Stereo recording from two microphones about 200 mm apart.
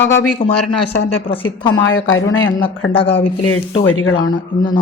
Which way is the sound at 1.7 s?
80° left.